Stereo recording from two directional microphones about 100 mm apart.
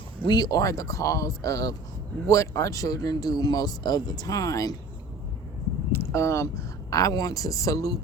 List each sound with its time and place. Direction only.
0.3 s speech: 45° left (ahead or behind)
5.9 s a sound: 25° left (ahead or behind)
6.9 s speech: 35° left (ahead or behind)